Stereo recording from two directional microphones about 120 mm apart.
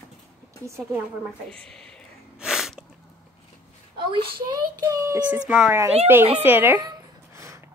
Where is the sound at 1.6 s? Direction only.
5° left (ahead or behind).